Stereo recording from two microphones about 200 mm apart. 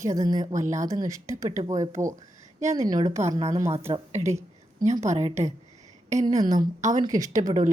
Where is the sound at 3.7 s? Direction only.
30° right (ahead or behind).